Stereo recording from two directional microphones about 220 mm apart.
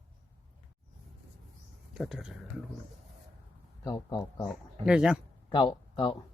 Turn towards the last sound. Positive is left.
turn(degrees=20)  # may be behind; listen again after turning